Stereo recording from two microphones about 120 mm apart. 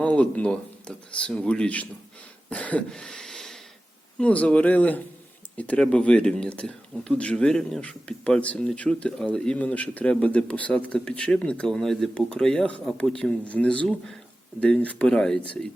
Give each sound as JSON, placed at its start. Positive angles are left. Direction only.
{"t": 0.0, "sound": "speech", "side_deg": 10}
{"t": 2.5, "sound": "throat clearing", "side_deg": 10}
{"t": 4.2, "sound": "speech", "side_deg": 10}